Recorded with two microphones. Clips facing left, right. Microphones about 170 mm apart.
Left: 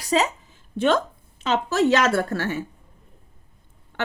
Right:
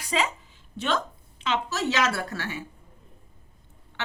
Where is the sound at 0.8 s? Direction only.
50° left (ahead or behind).